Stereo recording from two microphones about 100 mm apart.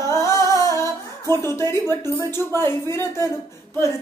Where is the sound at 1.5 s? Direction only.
25° left (ahead or behind).